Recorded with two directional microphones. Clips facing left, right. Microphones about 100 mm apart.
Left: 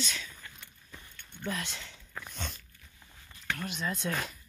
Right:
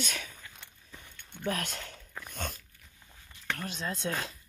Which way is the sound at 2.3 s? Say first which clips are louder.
Right 5 dB; 45° right (ahead or behind).